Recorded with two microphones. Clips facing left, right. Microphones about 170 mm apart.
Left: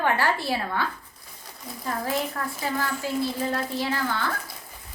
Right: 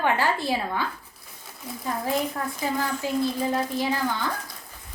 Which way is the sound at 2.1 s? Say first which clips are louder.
Right 3 dB; 20° right (ahead or behind).